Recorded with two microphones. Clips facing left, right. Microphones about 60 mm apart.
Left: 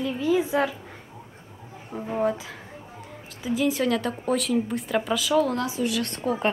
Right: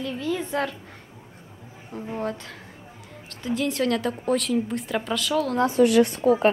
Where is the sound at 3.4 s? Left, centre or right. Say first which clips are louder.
Left 1 dB; centre.